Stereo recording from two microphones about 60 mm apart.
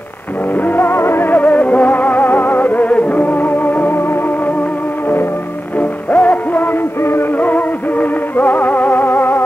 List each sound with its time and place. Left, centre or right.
0.6 s music: left
5.8 s music: left
7.3 s music: left